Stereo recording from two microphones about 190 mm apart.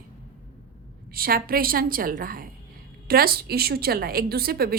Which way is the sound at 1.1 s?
50° right (ahead or behind).